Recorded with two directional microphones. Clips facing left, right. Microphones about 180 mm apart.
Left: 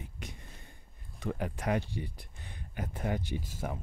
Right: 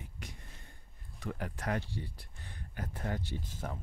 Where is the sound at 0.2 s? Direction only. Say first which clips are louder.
Left 3 dB; 20° left (ahead or behind).